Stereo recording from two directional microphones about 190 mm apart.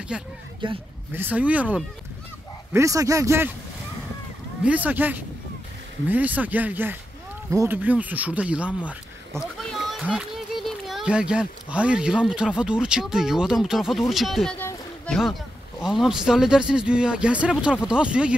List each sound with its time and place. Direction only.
0.1 s speech: 5° right (ahead or behind)
0.6 s speech: 25° right (ahead or behind)
1.1 s speech: 10° right (ahead or behind)
4.6 s speech: 10° right (ahead or behind)